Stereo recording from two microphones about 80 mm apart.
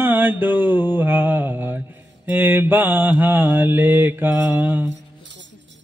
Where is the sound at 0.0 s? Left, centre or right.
Right.